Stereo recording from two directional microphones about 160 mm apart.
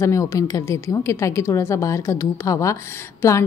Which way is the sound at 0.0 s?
20° left (ahead or behind).